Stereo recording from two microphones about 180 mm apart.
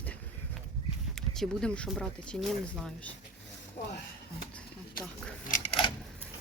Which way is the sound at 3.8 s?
50° left (ahead or behind).